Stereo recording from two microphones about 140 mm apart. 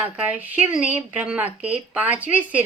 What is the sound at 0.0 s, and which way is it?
A woman's voice, 10° right (ahead or behind).